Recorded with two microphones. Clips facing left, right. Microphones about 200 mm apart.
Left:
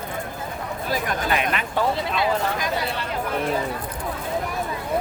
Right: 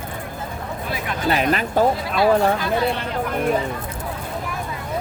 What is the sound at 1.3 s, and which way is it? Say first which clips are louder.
Speech: right 9 dB; 35° right (ahead or behind).